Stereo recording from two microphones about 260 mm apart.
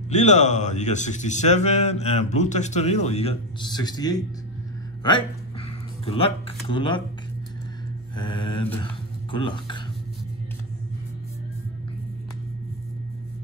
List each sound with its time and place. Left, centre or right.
0.1 s speech: left
8.2 s speech: centre